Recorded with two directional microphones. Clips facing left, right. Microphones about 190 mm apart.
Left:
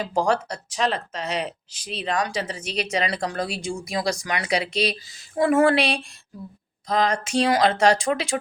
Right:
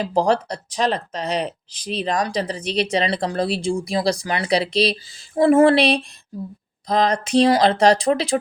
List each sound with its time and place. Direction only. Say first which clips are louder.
0.0 s speech: right 4 dB; 35° right (ahead or behind)